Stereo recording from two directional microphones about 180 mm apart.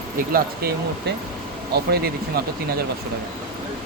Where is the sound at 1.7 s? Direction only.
65° right (ahead or behind).